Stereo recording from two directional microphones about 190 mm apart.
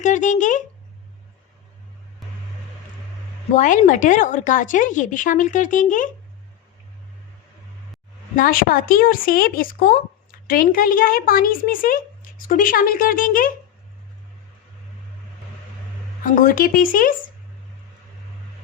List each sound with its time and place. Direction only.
0.0 s speech: 40° left (ahead or behind)
3.5 s a woman's voice: 40° left (ahead or behind)
8.4 s a woman's voice: 50° left (ahead or behind)
16.2 s a woman's voice: 45° left (ahead or behind)